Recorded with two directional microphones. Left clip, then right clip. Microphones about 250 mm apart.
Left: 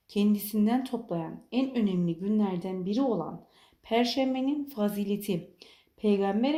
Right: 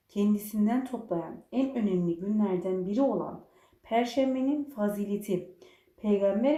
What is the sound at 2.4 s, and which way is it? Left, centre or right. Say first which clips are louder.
A woman's voice: right 2 dB; left.